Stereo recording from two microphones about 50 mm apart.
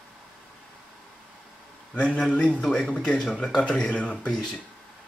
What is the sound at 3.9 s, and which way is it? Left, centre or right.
Speech, left.